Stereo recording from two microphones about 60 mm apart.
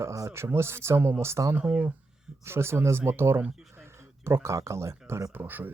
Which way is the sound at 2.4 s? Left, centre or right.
Right.